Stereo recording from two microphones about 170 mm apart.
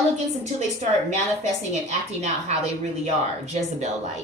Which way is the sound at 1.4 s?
45° right (ahead or behind).